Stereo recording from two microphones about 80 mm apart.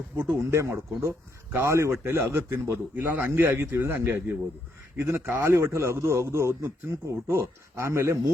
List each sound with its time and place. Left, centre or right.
0.2 s a man's voice: right